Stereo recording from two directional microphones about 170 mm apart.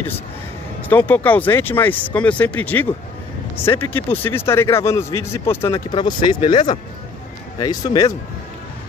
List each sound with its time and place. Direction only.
0.8 s a man's voice: 10° left (ahead or behind)
5.9 s speech: 25° left (ahead or behind)